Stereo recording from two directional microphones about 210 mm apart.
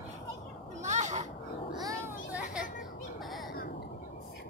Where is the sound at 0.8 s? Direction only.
35° right (ahead or behind).